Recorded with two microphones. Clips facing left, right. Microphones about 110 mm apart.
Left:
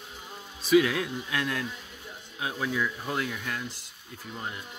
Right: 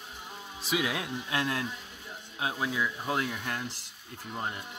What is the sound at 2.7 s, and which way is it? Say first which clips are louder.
Speech: left 5 dB; 10° right (ahead or behind).